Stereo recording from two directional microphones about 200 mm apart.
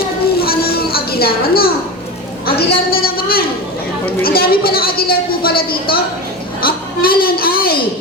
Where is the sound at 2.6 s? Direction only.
45° left (ahead or behind).